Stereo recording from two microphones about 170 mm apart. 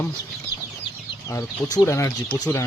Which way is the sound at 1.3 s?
20° left (ahead or behind).